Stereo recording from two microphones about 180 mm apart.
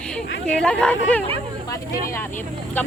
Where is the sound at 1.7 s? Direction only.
15° left (ahead or behind).